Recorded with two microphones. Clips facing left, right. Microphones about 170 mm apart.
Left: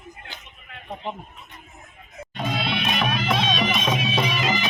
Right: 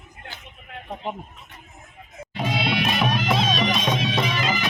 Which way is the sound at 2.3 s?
10° right (ahead or behind).